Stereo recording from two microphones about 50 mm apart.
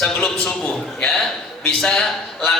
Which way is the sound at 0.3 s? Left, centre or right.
Left.